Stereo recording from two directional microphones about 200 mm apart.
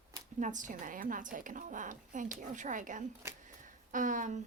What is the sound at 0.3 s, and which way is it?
A woman's voice, 40° right (ahead or behind).